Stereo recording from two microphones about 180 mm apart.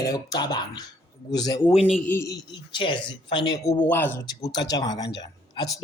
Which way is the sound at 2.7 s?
25° left (ahead or behind).